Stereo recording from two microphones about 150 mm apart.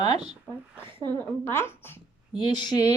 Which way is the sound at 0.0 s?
30° left (ahead or behind).